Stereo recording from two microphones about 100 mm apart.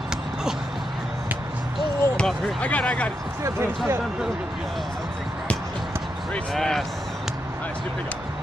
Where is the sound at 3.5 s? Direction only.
30° right (ahead or behind).